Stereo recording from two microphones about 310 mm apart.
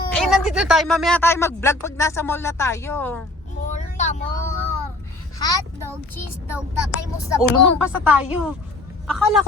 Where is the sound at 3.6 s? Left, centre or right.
Left.